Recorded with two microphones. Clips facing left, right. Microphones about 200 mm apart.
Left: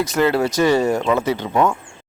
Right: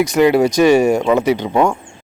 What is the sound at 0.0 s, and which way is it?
Speech, 15° right (ahead or behind).